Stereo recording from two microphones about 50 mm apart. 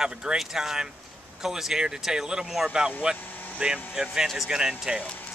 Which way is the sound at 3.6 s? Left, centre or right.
Right.